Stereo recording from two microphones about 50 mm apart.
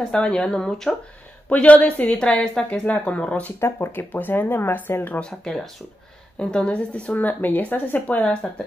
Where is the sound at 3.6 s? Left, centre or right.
Left.